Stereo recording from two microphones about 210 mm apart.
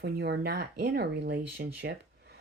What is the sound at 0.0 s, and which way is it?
Speech, 50° right (ahead or behind).